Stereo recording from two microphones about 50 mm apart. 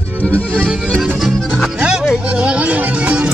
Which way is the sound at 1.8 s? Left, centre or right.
Centre.